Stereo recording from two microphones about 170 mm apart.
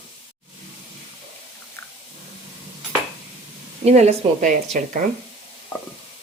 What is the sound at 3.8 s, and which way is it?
A woman's voice, 40° right (ahead or behind).